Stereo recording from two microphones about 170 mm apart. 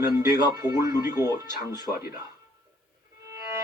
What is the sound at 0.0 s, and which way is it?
A man's voice, 15° right (ahead or behind).